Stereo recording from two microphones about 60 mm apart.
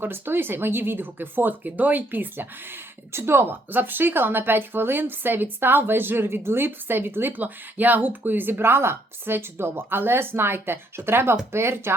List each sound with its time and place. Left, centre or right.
0.0 s speech: right